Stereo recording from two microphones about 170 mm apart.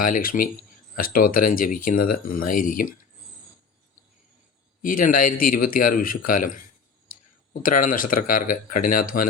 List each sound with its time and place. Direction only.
0.0 s speech: 55° left (ahead or behind)
4.8 s speech: 55° left (ahead or behind)
7.6 s speech: 55° left (ahead or behind)